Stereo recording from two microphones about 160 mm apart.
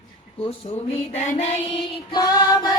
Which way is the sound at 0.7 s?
45° left (ahead or behind).